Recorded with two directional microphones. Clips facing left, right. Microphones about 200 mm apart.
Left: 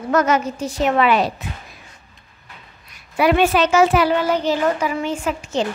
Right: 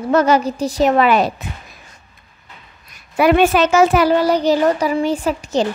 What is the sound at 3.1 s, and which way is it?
A child's voice, 50° right (ahead or behind).